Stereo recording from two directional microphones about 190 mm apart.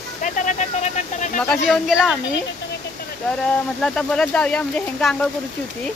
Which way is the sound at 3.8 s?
5° left (ahead or behind).